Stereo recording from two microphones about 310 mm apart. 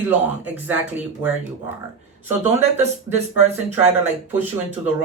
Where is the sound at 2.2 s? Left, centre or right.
Centre.